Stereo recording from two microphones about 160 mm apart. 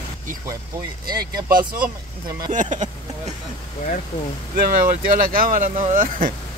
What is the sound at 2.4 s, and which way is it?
Speech, 50° right (ahead or behind).